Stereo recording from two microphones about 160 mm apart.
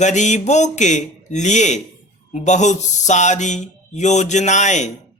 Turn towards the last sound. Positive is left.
turn(degrees=50)  # may be behind; listen again after turning